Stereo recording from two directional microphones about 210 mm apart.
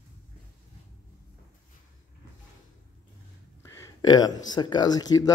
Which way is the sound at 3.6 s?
15° left (ahead or behind).